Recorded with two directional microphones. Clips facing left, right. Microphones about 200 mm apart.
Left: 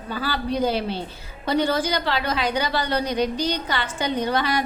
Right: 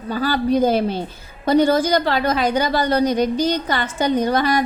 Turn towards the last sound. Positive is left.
turn(degrees=-45)  # may be behind; listen again after turning